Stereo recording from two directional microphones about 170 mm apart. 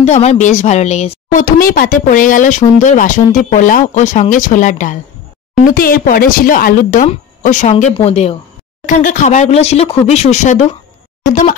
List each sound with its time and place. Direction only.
0.0 s speech: 40° left (ahead or behind)
1.4 s a woman's voice: 55° left (ahead or behind); by 8.4 s 40° left (ahead or behind)
8.8 s speech: 50° left (ahead or behind)